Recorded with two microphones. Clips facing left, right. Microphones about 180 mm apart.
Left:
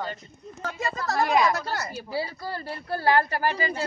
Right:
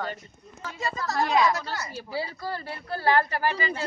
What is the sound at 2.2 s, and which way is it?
Speech, 40° left (ahead or behind).